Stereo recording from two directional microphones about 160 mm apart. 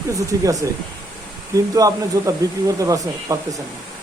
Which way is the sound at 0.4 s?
20° right (ahead or behind).